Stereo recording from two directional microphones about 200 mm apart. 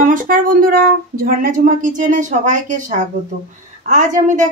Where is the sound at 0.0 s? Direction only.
40° right (ahead or behind).